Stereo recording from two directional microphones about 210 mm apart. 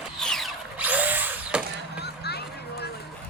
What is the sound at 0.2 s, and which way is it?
Drill, centre (ahead or behind).